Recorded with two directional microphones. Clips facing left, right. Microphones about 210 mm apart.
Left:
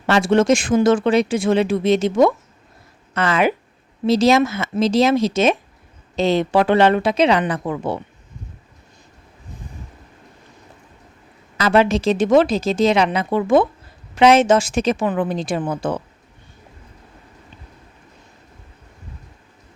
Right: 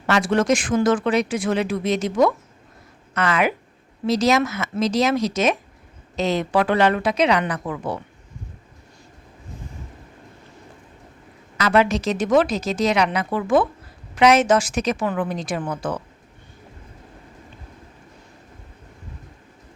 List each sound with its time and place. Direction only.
0.1 s speech: 25° left (ahead or behind)
11.5 s speech: 30° left (ahead or behind)